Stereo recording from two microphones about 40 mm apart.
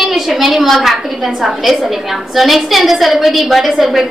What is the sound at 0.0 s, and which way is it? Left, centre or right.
A woman's voice, centre.